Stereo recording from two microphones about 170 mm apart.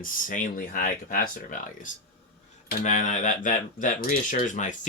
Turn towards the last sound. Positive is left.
turn(degrees=45)  # may be behind; listen again after turning